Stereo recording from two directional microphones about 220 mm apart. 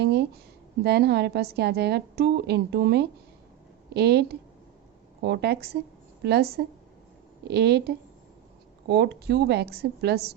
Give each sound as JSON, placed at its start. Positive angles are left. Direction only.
{"t": 0.0, "sound": "a woman's voice", "side_deg": -50}